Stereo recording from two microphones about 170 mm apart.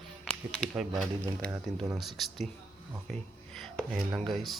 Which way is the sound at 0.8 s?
Centre (ahead or behind).